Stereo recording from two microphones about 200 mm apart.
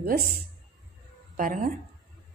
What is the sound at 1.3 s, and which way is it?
Speech, 40° right (ahead or behind).